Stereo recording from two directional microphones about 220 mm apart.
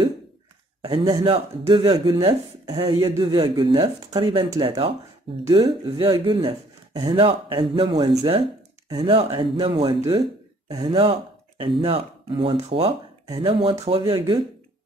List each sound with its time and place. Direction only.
0.8 s speech: 20° right (ahead or behind)